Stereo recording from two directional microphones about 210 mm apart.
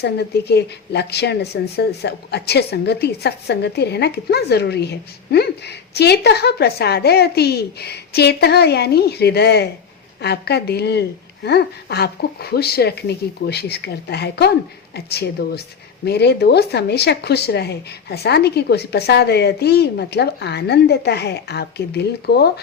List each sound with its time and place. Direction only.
0.0 s a woman's voice: 50° left (ahead or behind)